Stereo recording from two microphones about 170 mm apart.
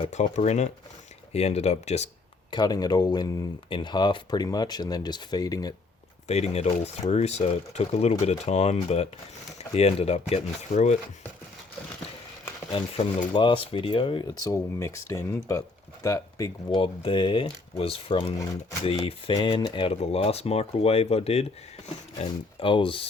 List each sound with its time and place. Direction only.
0.0 s speech: 45° left (ahead or behind)
2.5 s speech: 25° left (ahead or behind)
6.2 s speech: 40° left (ahead or behind)
12.7 s speech: 30° left (ahead or behind)